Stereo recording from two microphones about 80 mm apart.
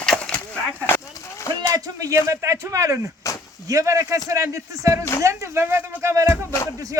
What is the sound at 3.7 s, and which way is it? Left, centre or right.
Speech, right.